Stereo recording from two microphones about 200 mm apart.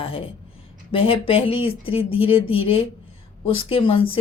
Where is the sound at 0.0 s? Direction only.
30° left (ahead or behind).